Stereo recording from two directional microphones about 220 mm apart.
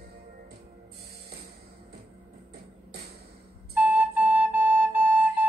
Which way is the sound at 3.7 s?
5° right (ahead or behind).